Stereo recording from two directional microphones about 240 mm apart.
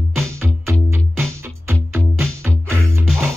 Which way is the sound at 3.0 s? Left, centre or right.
Centre.